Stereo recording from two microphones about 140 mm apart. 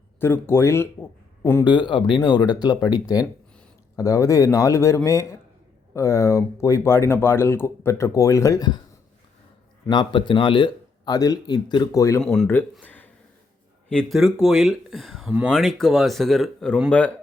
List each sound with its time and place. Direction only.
0.2 s a man's voice: 15° left (ahead or behind)
1.6 s speech: 35° left (ahead or behind)
9.8 s speech: 35° left (ahead or behind)
12.2 s speech: 5° left (ahead or behind)
12.8 s a sound: 10° left (ahead or behind)
13.9 s speech: centre (ahead or behind)